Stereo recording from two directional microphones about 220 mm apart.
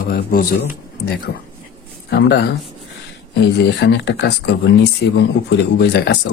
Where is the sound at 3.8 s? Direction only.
50° left (ahead or behind).